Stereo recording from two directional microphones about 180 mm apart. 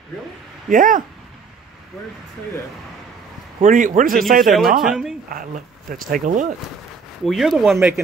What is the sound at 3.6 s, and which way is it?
Speech, 45° right (ahead or behind).